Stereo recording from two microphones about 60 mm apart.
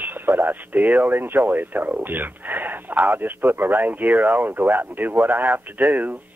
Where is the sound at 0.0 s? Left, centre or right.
Right.